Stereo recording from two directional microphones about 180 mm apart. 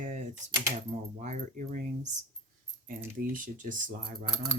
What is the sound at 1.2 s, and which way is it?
Speech, 45° right (ahead or behind).